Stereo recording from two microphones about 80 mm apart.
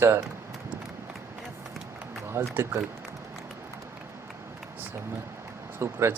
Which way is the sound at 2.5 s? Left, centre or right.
Right.